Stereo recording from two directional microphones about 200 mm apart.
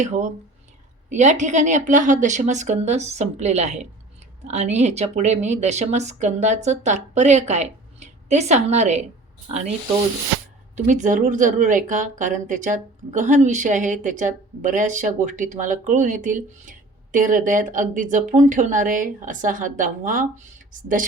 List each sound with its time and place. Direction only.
0.0 s a woman's voice: 35° right (ahead or behind)
10.8 s a woman's voice: 40° right (ahead or behind)